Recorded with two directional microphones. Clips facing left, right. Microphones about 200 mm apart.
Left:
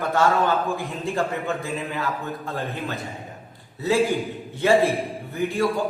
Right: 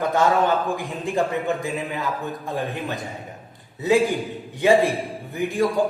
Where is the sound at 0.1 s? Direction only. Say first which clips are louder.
Even; 15° right (ahead or behind).